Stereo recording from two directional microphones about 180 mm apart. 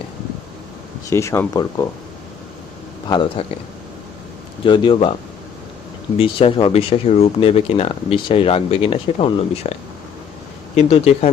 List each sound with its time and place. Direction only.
1.1 s speech: 15° left (ahead or behind)
3.1 s speech: 25° left (ahead or behind)
4.6 s speech: 25° left (ahead or behind)
6.1 s speech: 30° left (ahead or behind)
10.8 s speech: 35° left (ahead or behind)